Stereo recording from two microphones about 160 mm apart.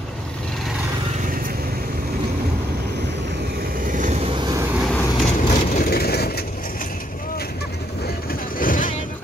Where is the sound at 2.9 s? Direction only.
90° right; by 4.2 s 55° right (ahead or behind).